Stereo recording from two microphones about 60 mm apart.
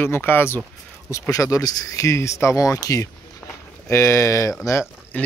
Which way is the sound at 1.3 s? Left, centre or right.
Left.